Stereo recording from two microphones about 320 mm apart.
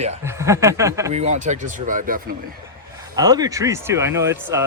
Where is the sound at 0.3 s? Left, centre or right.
Centre.